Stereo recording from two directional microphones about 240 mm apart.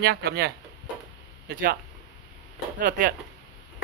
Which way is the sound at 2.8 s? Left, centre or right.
Right.